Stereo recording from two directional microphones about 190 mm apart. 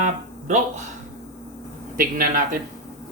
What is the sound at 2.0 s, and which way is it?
Speech, 45° right (ahead or behind).